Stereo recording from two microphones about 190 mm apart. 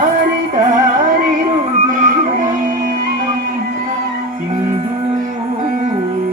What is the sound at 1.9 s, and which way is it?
Music, 45° right (ahead or behind).